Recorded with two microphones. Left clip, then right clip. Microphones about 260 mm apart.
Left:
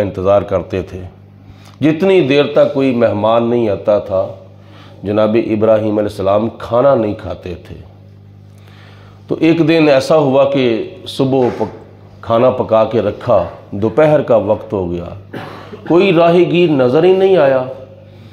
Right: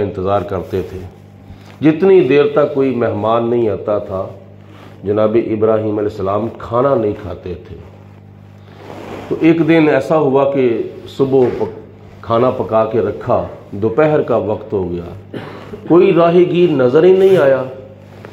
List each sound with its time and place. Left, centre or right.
0.0 s speech: left
9.4 s speech: left
11.1 s speech: left